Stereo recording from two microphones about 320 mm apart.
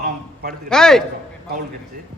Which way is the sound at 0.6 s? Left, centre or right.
Centre.